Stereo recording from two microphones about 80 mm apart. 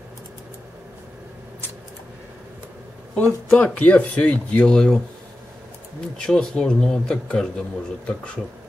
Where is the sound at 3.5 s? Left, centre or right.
Centre.